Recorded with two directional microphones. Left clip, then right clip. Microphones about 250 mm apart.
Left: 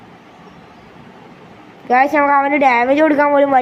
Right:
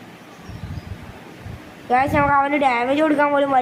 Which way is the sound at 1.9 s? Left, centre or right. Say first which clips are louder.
Left 5 dB; centre.